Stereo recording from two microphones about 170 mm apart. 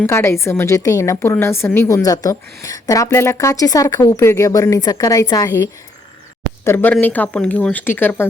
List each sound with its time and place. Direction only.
0.0 s a woman's voice: 15° left (ahead or behind)
6.7 s a woman's voice: 15° left (ahead or behind)